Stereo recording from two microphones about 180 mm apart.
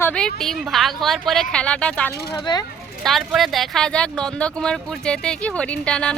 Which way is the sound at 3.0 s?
Centre (ahead or behind).